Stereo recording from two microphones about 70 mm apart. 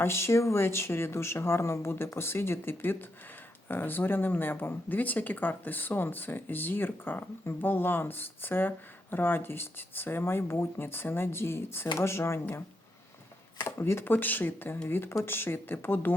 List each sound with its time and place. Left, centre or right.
0.0 s speech: left
13.7 s speech: left
14.1 s speech: left